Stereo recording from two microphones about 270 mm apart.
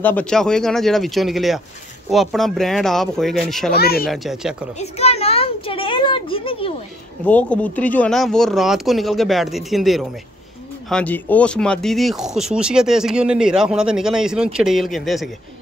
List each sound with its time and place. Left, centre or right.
0.0 s speech: centre
3.7 s speech: left
4.1 s speech: centre
4.7 s a sound: left
7.2 s speech: centre